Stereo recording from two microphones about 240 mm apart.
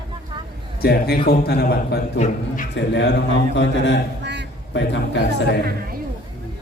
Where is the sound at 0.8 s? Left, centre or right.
Left.